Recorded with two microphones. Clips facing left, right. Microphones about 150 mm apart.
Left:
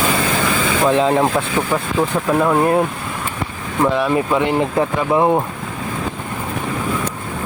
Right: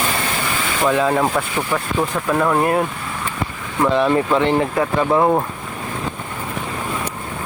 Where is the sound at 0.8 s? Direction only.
20° left (ahead or behind).